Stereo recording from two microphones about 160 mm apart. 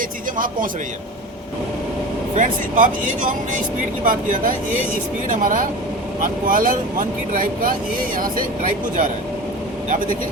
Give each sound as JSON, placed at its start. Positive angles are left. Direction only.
{"t": 0.3, "sound": "speech", "side_deg": -60}
{"t": 2.3, "sound": "speech", "side_deg": -55}